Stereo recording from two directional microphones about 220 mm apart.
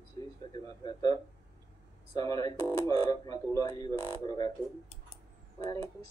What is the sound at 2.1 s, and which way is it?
Speech, 15° left (ahead or behind).